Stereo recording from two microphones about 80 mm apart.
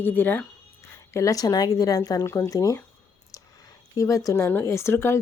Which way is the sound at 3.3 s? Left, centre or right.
Left.